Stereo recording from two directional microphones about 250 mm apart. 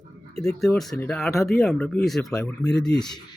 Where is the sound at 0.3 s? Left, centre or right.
Centre.